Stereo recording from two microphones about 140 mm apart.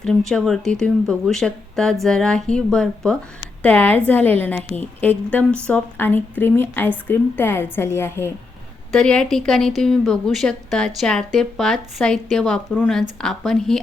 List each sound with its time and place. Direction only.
0.3 s a woman's voice: centre (ahead or behind)
8.9 s a woman's voice: 5° left (ahead or behind)